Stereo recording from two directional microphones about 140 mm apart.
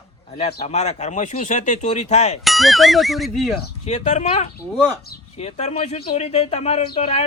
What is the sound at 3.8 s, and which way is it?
Speech, 55° left (ahead or behind).